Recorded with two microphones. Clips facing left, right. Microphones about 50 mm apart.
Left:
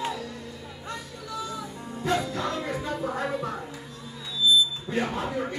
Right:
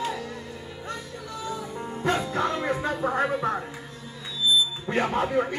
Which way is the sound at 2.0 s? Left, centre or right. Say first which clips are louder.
Right 2 dB; right.